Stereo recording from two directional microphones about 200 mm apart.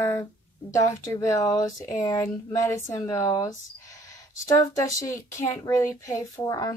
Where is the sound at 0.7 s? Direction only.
15° left (ahead or behind).